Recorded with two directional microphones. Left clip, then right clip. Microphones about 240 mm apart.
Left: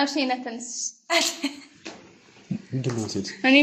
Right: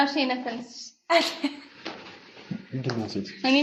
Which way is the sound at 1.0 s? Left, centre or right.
Left.